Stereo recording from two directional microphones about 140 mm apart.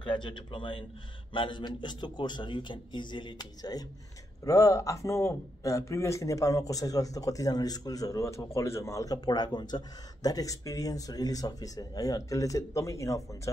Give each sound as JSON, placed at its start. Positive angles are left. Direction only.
{"t": 0.0, "sound": "a man's voice", "side_deg": 35}